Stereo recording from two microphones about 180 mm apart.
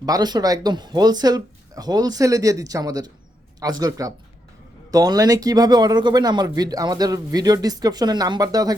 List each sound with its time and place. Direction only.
0.0 s speech: 20° right (ahead or behind)